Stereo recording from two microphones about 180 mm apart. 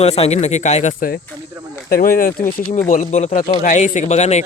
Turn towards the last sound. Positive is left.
turn(degrees=40)  # may be behind; listen again after turning